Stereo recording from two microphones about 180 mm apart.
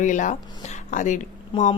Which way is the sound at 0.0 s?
45° left (ahead or behind).